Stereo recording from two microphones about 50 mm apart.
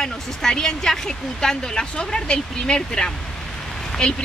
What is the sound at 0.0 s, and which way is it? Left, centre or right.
Speech, centre.